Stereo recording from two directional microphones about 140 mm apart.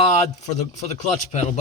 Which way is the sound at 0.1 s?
55° left (ahead or behind).